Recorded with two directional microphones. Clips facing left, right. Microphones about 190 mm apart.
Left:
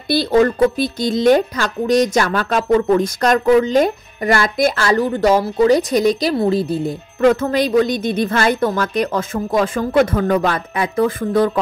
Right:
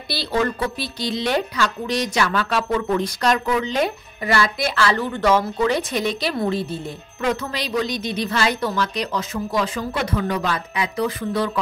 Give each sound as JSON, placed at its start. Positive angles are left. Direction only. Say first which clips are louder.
{"t": 0.1, "sound": "speech", "louder": "left 9 dB", "side_deg": 45}
{"t": 7.2, "sound": "speech", "louder": "left 10 dB", "side_deg": 50}